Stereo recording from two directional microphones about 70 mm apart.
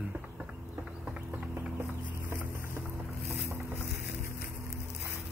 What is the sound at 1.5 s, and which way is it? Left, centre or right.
Music, right.